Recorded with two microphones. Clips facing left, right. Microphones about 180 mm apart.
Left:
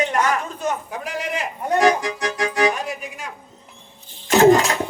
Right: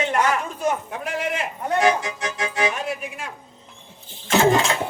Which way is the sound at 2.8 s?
Centre (ahead or behind).